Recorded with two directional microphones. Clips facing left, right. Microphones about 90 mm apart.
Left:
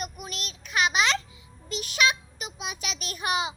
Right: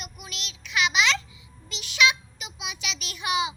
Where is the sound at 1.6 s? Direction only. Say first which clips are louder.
Right 1 dB; 40° left (ahead or behind).